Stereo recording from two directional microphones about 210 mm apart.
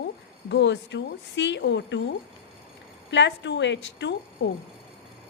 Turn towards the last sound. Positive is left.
turn(degrees=55)  # may be behind; listen again after turning